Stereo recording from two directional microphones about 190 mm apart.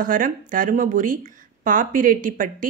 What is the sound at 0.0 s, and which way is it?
Speech, 45° right (ahead or behind).